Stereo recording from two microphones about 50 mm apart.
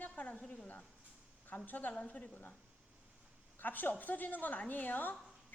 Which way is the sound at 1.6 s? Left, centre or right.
Left.